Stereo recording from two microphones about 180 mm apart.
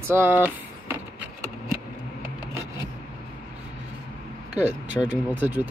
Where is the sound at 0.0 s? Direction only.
10° right (ahead or behind).